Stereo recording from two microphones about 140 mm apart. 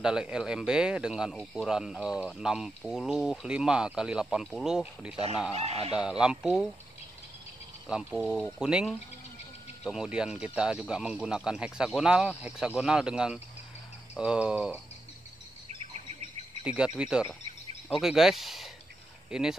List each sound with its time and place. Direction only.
0.0 s speech: 5° right (ahead or behind)
5.5 s speech: 45° right (ahead or behind)
5.9 s speech: 5° right (ahead or behind)
7.9 s speech: 5° right (ahead or behind)
14.1 s cricket: 5° right (ahead or behind)
16.6 s speech: 5° right (ahead or behind)